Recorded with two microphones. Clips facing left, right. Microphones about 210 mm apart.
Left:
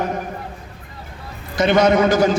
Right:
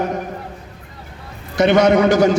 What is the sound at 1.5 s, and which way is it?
Speech, 70° right (ahead or behind).